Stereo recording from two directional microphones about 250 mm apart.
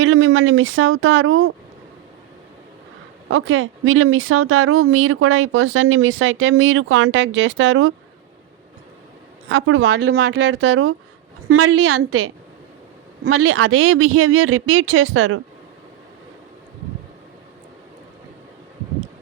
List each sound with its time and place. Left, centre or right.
0.0 s speech: right
3.2 s speech: right
9.5 s speech: right
10.1 s speech: right
13.3 s speech: right